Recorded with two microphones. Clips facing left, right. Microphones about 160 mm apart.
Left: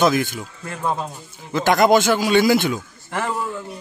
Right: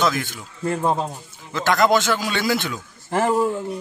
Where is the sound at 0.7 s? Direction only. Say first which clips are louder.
Right 4 dB; 25° right (ahead or behind).